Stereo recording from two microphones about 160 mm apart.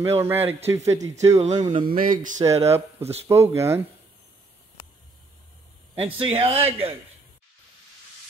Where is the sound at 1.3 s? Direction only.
45° right (ahead or behind).